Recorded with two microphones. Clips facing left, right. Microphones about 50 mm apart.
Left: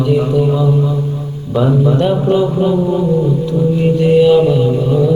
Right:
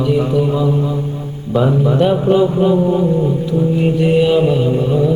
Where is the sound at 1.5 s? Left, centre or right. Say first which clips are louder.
Left 1 dB; centre.